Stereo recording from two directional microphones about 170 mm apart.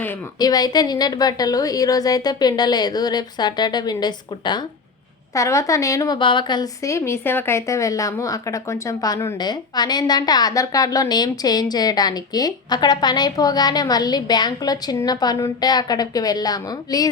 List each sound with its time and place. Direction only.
0.3 s a woman's voice: 25° left (ahead or behind)